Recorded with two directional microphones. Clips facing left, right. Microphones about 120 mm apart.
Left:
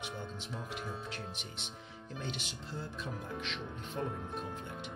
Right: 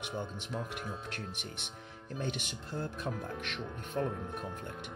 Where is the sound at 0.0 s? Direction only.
60° right (ahead or behind).